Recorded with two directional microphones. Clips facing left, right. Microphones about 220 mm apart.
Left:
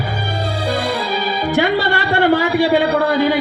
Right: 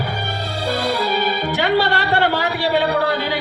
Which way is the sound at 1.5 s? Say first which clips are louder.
Left 3 dB; 50° left (ahead or behind).